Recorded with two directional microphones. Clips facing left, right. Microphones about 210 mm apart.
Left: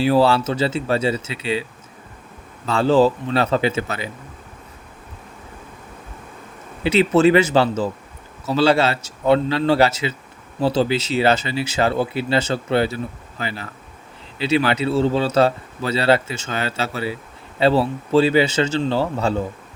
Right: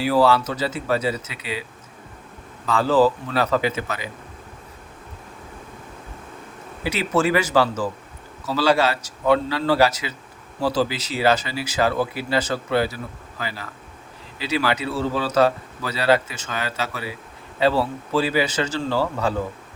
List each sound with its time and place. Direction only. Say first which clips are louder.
0.0 s speech: left 2 dB; 25° left (ahead or behind)
2.6 s speech: left 2 dB; 25° left (ahead or behind)
6.8 s speech: left 7 dB; 25° left (ahead or behind)